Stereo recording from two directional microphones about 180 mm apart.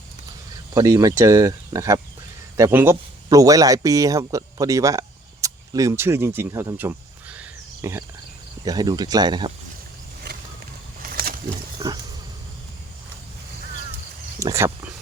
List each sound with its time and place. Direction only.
0.7 s speech: 20° right (ahead or behind)
11.0 s a sound: 55° right (ahead or behind)
14.3 s speech: 15° right (ahead or behind)